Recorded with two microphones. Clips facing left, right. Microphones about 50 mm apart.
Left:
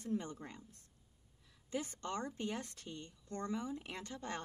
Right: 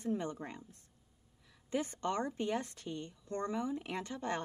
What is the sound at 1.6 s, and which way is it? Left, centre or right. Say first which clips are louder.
Speech: right 6 dB; right.